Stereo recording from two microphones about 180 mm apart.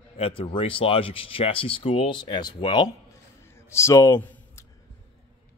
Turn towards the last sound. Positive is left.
turn(degrees=15)  # may be behind; listen again after turning